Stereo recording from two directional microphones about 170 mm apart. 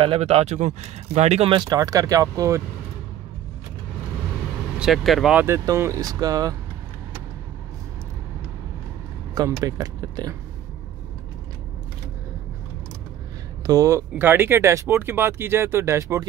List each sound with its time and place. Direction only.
0.0 s speech: 35° right (ahead or behind); by 2.6 s 20° right (ahead or behind)
4.7 s speech: centre (ahead or behind); by 6.5 s 20° right (ahead or behind)
9.3 s speech: 20° right (ahead or behind)
13.7 s speech: 20° right (ahead or behind)